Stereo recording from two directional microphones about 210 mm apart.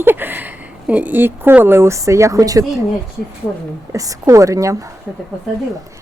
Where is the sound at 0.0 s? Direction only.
10° right (ahead or behind).